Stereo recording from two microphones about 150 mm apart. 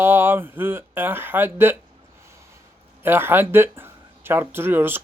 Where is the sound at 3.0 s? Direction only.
15° right (ahead or behind).